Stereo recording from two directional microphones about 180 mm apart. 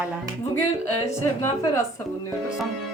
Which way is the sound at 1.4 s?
20° left (ahead or behind).